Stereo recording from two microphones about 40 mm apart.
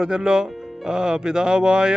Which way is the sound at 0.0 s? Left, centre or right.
Centre.